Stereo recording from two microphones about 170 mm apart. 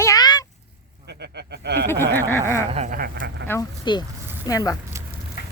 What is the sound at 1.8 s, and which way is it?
Speech, 15° left (ahead or behind).